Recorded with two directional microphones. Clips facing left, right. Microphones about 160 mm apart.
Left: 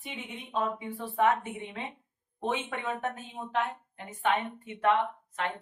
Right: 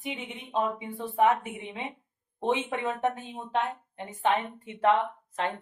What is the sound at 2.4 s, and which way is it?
A woman's voice, 20° right (ahead or behind).